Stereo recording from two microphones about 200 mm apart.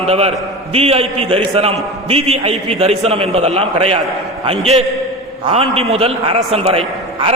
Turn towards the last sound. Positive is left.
turn(degrees=-30)  # may be behind; listen again after turning